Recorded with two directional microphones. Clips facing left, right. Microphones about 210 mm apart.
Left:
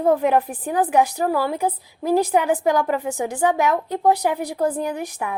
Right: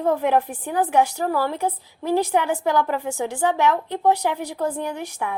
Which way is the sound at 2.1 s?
35° left (ahead or behind).